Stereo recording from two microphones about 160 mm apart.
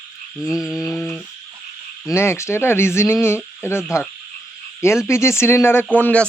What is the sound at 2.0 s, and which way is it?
Speech, 15° left (ahead or behind).